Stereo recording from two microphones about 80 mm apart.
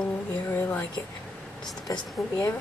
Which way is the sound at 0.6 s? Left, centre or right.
Left.